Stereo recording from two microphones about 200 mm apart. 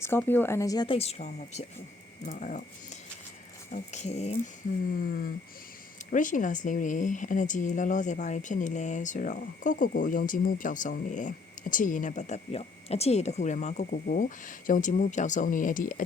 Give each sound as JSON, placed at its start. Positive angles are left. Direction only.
{"t": 0.0, "sound": "speech", "side_deg": 10}
{"t": 4.9, "sound": "speech", "side_deg": 45}